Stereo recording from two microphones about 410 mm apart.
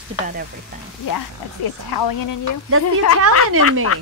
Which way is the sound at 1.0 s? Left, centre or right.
Left.